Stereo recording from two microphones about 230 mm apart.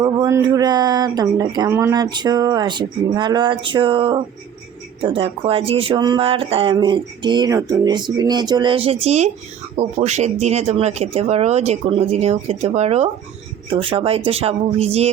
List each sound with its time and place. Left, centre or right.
0.0 s speech: centre